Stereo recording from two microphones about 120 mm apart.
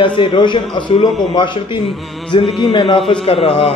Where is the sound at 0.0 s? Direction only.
45° left (ahead or behind).